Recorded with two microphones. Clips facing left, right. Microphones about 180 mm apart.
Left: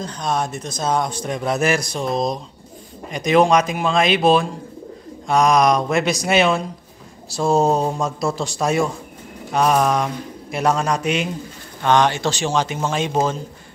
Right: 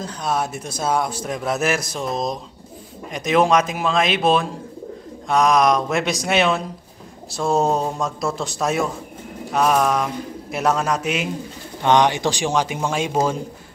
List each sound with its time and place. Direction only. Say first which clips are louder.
0.0 s a man's voice: left 1 dB; 5° right (ahead or behind)
11.8 s speech: even; 20° right (ahead or behind)